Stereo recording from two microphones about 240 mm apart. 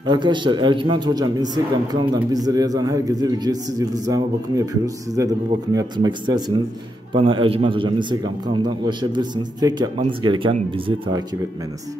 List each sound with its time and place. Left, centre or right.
0.0 s a man's voice: centre